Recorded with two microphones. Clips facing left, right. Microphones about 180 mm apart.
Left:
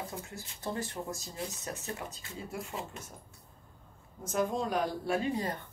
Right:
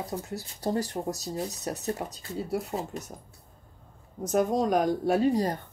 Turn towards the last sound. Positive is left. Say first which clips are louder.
# right 8 dB
turn(degrees=-40)  # may be behind; listen again after turning